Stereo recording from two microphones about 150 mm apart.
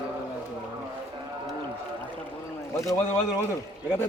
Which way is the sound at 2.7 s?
20° left (ahead or behind).